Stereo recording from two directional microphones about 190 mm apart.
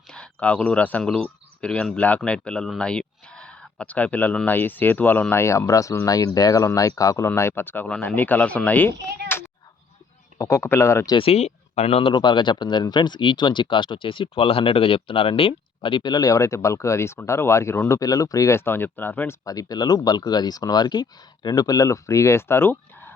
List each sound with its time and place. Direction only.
0.1 s speech: 5° left (ahead or behind)
9.3 s a sound: 10° left (ahead or behind)
10.3 s speech: 15° left (ahead or behind)
19.5 s speech: 20° left (ahead or behind)